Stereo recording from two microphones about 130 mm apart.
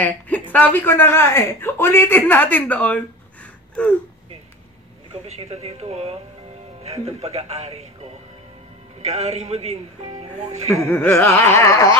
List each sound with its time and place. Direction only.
0.0 s speech: 10° left (ahead or behind)
5.2 s speech: 55° right (ahead or behind)
9.0 s speech: 55° right (ahead or behind)
10.8 s a sound: 15° left (ahead or behind)